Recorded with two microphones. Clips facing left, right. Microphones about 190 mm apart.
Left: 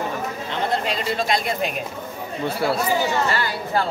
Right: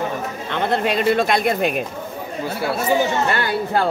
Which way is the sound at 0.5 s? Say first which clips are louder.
Right 5 dB; 60° right (ahead or behind).